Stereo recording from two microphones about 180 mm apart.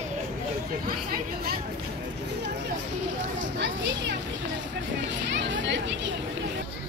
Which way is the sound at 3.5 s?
80° right.